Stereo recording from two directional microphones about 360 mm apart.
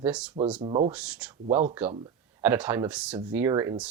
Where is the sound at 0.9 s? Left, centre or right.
Centre.